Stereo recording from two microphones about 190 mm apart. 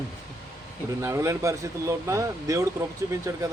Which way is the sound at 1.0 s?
15° right (ahead or behind).